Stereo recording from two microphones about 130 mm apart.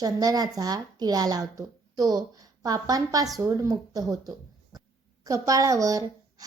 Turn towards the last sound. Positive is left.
turn(degrees=-25)  # may be behind; listen again after turning